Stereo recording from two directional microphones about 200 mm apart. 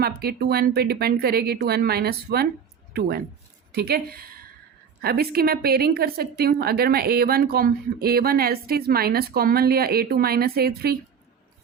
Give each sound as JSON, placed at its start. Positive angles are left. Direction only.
{"t": 0.0, "sound": "a woman's voice", "side_deg": -50}